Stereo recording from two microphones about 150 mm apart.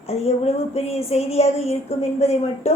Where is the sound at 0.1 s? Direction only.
45° left (ahead or behind).